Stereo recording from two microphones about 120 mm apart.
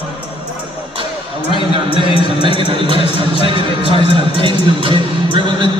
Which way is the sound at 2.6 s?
45° right (ahead or behind).